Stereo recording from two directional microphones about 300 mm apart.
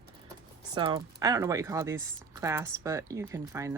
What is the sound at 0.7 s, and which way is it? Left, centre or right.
Speech, centre.